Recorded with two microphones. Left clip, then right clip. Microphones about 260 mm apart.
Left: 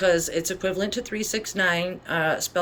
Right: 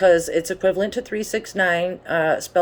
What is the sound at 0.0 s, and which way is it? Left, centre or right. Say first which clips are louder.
Speech: right 6 dB; centre.